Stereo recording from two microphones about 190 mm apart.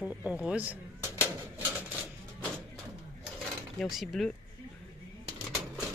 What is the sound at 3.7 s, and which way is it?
Speech, centre (ahead or behind).